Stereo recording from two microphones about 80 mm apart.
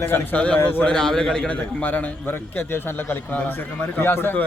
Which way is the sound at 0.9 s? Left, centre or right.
Centre.